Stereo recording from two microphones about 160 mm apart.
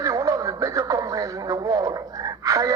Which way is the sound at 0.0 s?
20° right (ahead or behind).